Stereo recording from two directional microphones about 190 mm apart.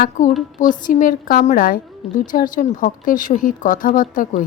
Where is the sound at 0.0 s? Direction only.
40° left (ahead or behind).